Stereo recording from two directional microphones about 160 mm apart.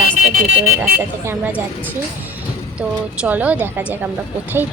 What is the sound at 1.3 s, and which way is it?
Speech, 10° right (ahead or behind).